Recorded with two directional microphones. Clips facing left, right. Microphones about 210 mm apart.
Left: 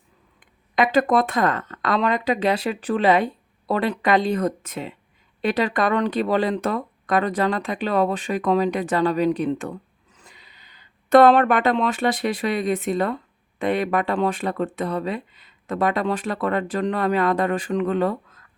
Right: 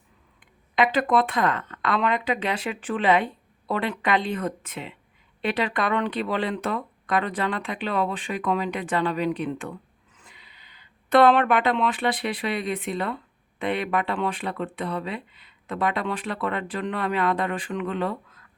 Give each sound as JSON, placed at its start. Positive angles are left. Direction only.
{"t": 0.3, "sound": "speech", "side_deg": 45}